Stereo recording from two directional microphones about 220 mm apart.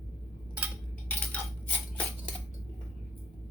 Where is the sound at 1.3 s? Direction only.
5° left (ahead or behind).